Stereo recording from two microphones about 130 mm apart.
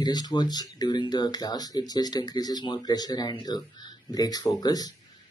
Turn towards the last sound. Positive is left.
turn(degrees=30)  # may be behind; listen again after turning